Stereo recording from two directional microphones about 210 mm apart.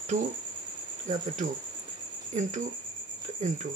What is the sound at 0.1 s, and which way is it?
Speech, 40° right (ahead or behind).